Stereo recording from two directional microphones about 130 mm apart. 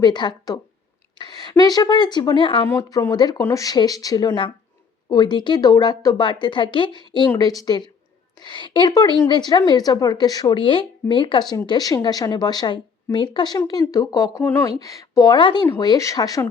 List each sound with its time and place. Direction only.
0.0 s speech: 35° left (ahead or behind)
2.6 s speech: 20° left (ahead or behind)